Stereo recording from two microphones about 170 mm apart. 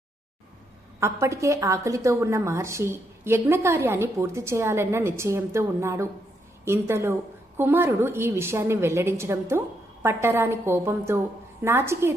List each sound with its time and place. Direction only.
0.9 s a woman's voice: 15° right (ahead or behind)